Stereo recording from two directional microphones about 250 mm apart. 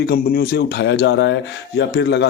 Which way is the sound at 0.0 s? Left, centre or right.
Left.